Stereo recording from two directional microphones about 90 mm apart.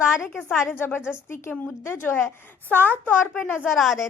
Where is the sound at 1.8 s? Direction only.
25° left (ahead or behind).